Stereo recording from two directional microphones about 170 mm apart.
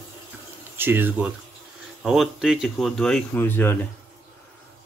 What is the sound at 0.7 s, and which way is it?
Speech, 10° right (ahead or behind).